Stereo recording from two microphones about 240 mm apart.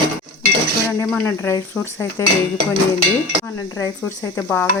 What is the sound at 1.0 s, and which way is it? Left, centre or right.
Speech, centre.